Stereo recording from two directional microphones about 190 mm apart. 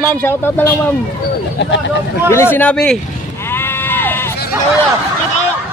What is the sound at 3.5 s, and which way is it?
Sheep, 10° left (ahead or behind).